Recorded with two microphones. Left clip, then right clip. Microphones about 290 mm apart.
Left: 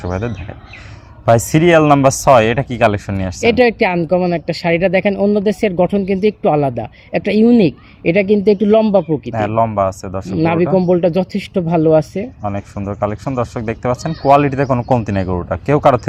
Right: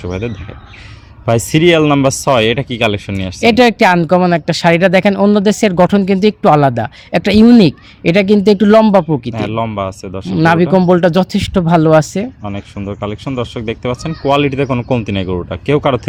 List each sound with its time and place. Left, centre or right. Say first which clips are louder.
0.0 s speech: right 1 dB; centre
3.6 s speech: right 5 dB; right
9.3 s speech: left 3 dB; centre
10.5 s speech: right 3 dB; right
12.4 s speech: left 2 dB; centre